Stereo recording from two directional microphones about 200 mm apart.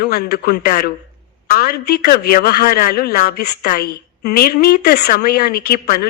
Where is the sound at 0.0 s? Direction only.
50° left (ahead or behind).